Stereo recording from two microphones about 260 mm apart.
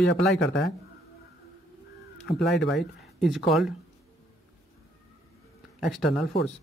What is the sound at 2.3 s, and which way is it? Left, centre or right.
Speech, centre.